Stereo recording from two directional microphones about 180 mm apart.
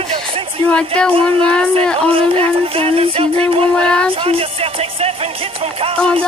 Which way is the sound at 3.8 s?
5° left (ahead or behind).